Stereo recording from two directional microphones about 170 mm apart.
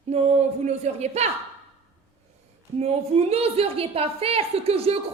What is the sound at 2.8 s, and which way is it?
A woman's voice, 35° right (ahead or behind).